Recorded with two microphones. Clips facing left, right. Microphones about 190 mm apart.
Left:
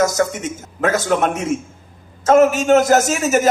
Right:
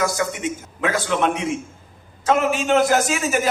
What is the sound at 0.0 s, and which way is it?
A man's voice, 45° left (ahead or behind).